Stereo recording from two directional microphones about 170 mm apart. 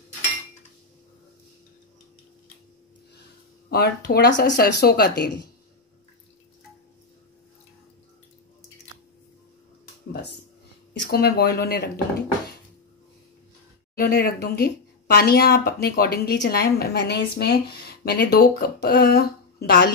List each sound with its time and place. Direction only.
3.7 s speech: 70° left (ahead or behind)
10.9 s speech: 80° left
13.9 s speech: 60° left (ahead or behind)